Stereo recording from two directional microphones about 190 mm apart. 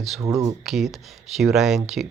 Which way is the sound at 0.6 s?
Centre (ahead or behind).